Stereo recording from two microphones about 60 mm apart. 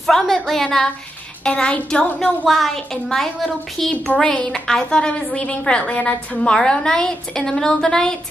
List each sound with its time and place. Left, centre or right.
0.0 s a woman's voice: centre
2.4 s a woman's voice: centre
4.1 s a woman's voice: centre